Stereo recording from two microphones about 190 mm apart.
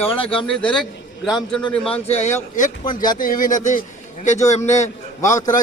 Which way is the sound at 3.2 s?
45° left (ahead or behind).